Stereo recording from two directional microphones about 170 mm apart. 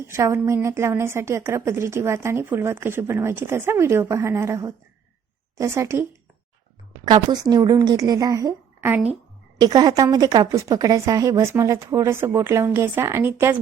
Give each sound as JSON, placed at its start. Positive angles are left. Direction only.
{"t": 0.0, "sound": "a woman's voice", "side_deg": -15}
{"t": 7.0, "sound": "a woman's voice", "side_deg": -25}